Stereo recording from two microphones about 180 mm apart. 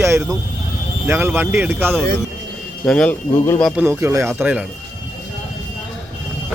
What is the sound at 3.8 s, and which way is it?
Speech, 15° right (ahead or behind).